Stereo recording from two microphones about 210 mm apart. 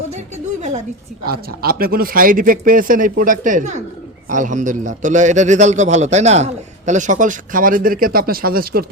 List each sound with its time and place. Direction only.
1.2 s a man's voice: 45° right (ahead or behind)